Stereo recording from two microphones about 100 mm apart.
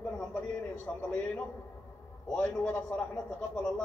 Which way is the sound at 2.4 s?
15° left (ahead or behind).